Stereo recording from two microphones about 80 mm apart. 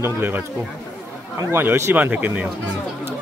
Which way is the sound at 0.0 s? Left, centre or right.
Right.